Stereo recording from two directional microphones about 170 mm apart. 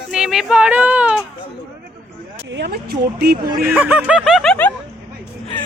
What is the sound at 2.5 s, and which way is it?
Speech, 80° right.